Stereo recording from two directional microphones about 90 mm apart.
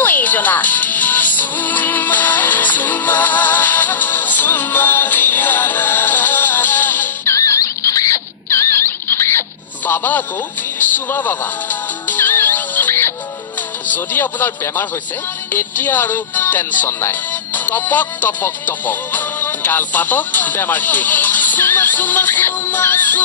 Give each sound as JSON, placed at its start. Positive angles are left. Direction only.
{"t": 0.0, "sound": "music", "side_deg": 20}
{"t": 7.3, "sound": "rodents", "side_deg": 35}
{"t": 9.8, "sound": "a man's voice", "side_deg": 20}
{"t": 12.1, "sound": "music", "side_deg": 20}
{"t": 13.8, "sound": "speech", "side_deg": 20}
{"t": 15.5, "sound": "music", "side_deg": 20}